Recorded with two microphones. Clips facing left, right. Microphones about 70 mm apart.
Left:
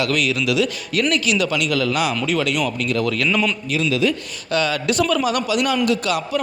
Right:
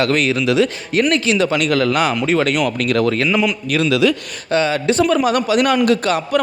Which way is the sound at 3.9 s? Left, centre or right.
Right.